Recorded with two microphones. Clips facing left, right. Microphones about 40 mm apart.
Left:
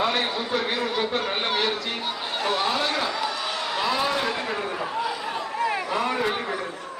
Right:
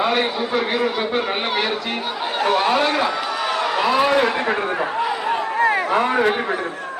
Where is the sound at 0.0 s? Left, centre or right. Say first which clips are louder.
Right 5 dB; centre.